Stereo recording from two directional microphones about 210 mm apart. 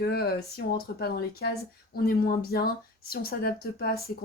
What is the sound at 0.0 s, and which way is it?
Speech, 50° left (ahead or behind).